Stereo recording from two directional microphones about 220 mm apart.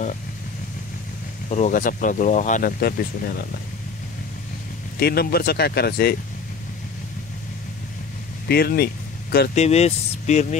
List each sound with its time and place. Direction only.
1.5 s speech: 35° left (ahead or behind)
5.0 s speech: 45° left (ahead or behind)
8.5 s speech: 45° left (ahead or behind)
9.6 s speech: 30° left (ahead or behind)